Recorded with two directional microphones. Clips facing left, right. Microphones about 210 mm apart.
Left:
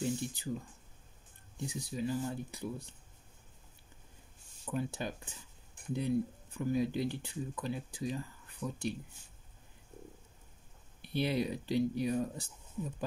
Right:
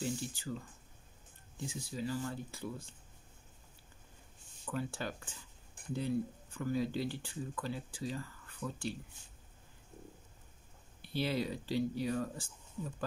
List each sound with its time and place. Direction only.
0.0 s speech: 20° left (ahead or behind)
1.7 s speech: 20° left (ahead or behind)
4.6 s speech: 20° left (ahead or behind)
11.0 s speech: 20° left (ahead or behind)